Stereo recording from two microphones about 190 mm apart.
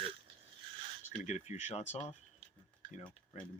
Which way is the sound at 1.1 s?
35° left (ahead or behind).